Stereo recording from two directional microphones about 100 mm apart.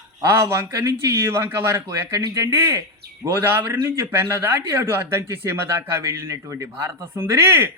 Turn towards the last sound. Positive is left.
turn(degrees=-25)  # may be behind; listen again after turning